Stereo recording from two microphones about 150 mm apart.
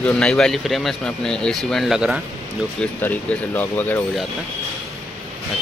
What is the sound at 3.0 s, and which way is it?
Speech, 10° left (ahead or behind).